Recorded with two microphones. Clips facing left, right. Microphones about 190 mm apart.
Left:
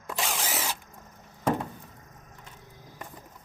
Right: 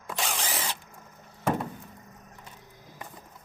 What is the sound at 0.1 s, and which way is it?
Drill, centre (ahead or behind).